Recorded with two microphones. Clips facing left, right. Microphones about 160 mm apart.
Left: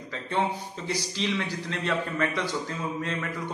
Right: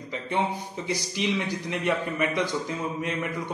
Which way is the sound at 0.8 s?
15° right (ahead or behind).